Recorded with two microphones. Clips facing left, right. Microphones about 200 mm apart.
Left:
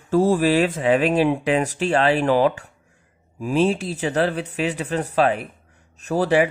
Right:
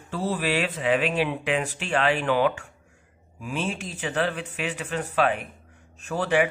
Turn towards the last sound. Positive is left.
turn(degrees=35)  # may be behind; listen again after turning